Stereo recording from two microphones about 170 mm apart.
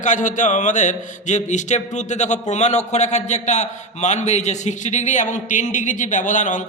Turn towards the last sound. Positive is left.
turn(degrees=45)  # may be behind; listen again after turning